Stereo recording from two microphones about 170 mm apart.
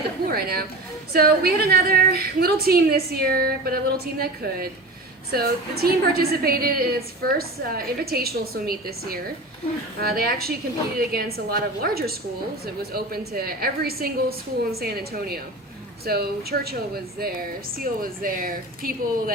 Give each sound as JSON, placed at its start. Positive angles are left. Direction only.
{"t": 0.3, "sound": "a woman's voice", "side_deg": -65}